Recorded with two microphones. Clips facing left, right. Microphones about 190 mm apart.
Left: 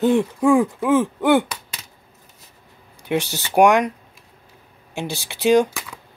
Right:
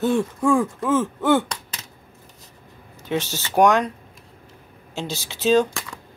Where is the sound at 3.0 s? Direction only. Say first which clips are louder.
Left 2 dB; 15° left (ahead or behind).